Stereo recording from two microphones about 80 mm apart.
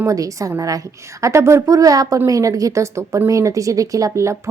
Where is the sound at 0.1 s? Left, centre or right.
Right.